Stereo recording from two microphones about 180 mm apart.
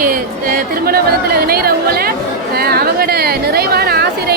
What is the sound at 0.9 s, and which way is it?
Speech, 55° right (ahead or behind).